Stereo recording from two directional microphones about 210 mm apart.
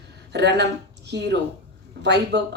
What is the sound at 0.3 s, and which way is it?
A woman's voice, 55° right (ahead or behind).